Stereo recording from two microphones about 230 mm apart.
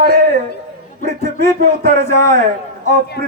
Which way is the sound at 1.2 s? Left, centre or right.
Centre.